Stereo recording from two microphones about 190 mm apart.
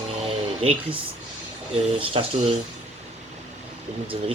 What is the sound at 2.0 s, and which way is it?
Speech, 30° right (ahead or behind).